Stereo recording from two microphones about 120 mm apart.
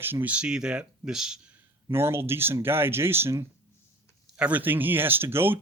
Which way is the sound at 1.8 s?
20° right (ahead or behind).